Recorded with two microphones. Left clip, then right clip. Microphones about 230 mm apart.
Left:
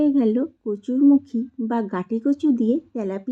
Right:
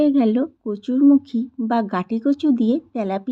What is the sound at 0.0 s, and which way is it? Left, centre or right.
A woman's voice, centre.